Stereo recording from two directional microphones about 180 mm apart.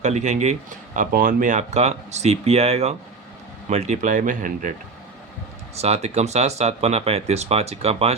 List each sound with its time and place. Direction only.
0.0 s speech: 40° right (ahead or behind)
0.9 s speech: 50° right (ahead or behind)
5.7 s speech: 35° right (ahead or behind)